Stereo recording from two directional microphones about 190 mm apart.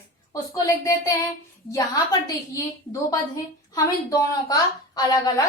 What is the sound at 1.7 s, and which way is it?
A woman's voice, 20° left (ahead or behind).